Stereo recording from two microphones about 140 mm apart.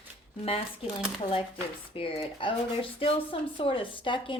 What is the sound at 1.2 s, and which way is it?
Speech, 40° left (ahead or behind).